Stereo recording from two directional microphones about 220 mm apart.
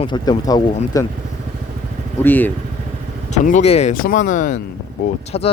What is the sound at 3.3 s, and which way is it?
Speech, 35° left (ahead or behind).